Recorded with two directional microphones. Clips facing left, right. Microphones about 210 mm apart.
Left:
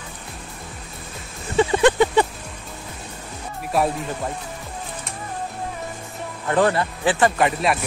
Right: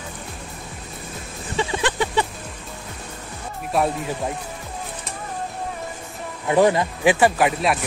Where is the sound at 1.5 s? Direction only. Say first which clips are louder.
Left 7 dB; 50° left (ahead or behind).